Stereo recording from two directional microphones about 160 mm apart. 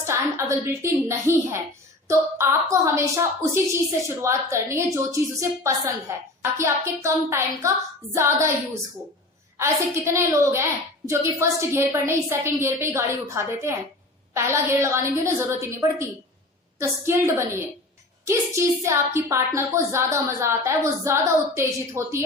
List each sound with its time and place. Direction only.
0.0 s a woman's voice: 15° right (ahead or behind)
9.6 s a woman's voice: 15° right (ahead or behind)